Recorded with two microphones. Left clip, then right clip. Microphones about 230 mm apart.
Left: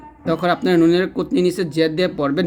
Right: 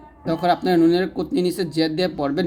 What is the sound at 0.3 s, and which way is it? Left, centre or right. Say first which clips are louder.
Speech: left 1 dB; centre.